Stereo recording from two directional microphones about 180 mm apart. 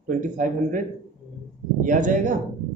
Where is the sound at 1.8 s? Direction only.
45° right (ahead or behind).